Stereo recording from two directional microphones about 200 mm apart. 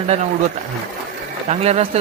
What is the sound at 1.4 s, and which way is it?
Speech, 30° right (ahead or behind).